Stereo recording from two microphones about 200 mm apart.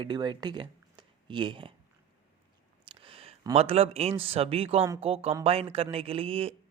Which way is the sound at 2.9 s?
25° right (ahead or behind).